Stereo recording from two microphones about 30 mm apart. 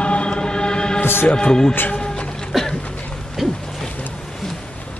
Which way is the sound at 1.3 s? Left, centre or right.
Left.